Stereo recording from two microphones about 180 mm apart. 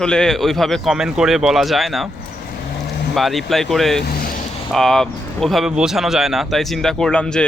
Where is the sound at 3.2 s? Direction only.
Centre (ahead or behind).